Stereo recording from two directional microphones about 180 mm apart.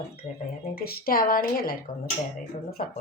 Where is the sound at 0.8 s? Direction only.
55° left (ahead or behind).